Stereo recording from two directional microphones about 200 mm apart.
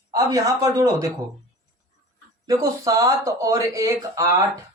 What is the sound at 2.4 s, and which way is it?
Speech, 15° right (ahead or behind).